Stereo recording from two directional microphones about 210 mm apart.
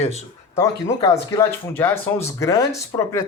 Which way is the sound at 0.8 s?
15° left (ahead or behind).